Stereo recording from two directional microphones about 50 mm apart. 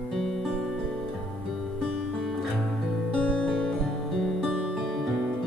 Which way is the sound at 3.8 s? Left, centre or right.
Centre.